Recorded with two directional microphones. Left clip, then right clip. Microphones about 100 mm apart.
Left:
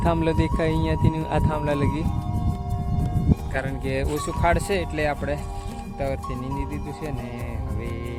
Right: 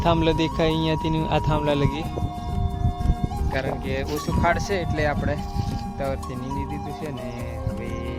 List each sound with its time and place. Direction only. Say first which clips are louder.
0.0 s speech: right 2 dB; 15° right (ahead or behind)
3.5 s speech: right 6 dB; 90° left
4.4 s speech: even; 15° left (ahead or behind)